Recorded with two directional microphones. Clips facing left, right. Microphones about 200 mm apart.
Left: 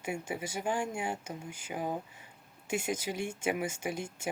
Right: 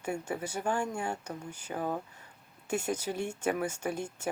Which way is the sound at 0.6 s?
10° left (ahead or behind).